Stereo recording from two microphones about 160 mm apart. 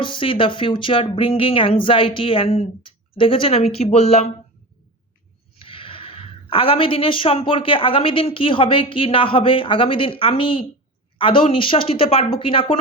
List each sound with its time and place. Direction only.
0.0 s a woman's voice: 30° left (ahead or behind)
5.5 s a woman's voice: 35° left (ahead or behind)